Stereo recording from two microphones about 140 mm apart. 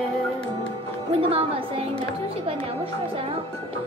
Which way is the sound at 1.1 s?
40° right (ahead or behind).